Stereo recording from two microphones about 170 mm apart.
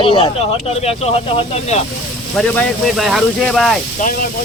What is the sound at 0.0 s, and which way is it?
Speech, 30° left (ahead or behind).